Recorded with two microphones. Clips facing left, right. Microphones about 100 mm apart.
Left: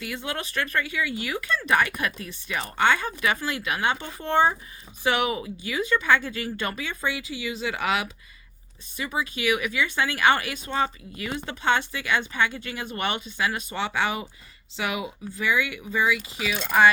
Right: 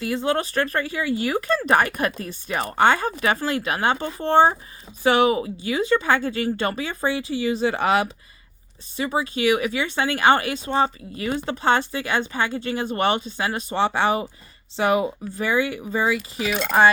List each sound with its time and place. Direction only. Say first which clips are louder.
0.0 s speech: right 9 dB; 30° right (ahead or behind)
16.5 s speech: right 5 dB; 70° right (ahead or behind)